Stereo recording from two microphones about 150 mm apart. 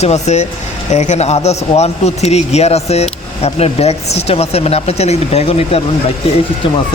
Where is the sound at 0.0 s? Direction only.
50° left (ahead or behind).